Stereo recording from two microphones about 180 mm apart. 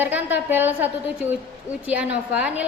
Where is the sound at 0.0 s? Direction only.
10° right (ahead or behind).